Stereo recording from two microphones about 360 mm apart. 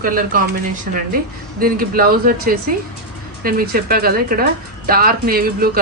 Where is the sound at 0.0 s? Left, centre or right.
Right.